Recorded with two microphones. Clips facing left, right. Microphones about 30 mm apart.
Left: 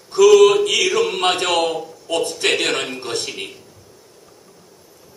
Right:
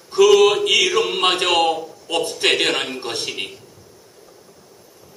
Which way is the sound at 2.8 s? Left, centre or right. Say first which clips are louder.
Left 1 dB; centre.